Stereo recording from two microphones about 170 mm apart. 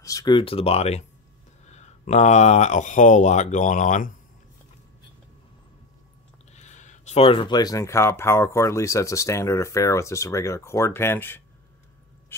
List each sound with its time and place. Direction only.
0.0 s speech: 20° left (ahead or behind); by 4.1 s 45° left (ahead or behind)
6.5 s speech: 45° left (ahead or behind); by 11.4 s 10° left (ahead or behind)
12.3 s a sound: 15° left (ahead or behind)